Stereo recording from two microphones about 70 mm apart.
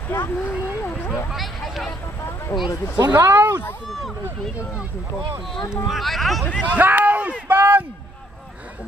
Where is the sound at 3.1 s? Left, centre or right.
Right.